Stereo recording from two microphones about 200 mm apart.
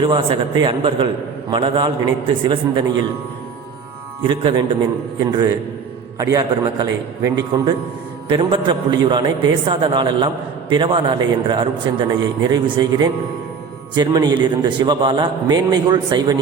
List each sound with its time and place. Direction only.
0.0 s a man's voice: 25° right (ahead or behind)
4.2 s a man's voice: 25° right (ahead or behind)